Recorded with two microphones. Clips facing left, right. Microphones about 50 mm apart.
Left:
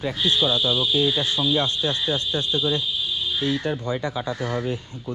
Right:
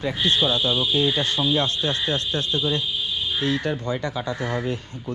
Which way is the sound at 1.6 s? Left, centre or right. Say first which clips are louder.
Even; right.